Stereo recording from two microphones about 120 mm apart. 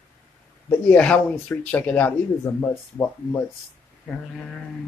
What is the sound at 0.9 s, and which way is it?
Speech, 10° left (ahead or behind).